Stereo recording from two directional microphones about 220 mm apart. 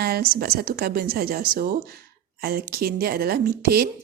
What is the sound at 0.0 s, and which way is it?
Speech, 45° right (ahead or behind).